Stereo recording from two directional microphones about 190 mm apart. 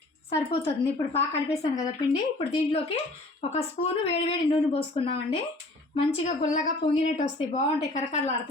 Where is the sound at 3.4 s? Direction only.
30° left (ahead or behind).